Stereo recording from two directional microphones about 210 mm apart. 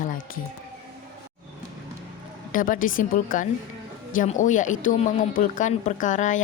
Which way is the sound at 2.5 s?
40° left (ahead or behind).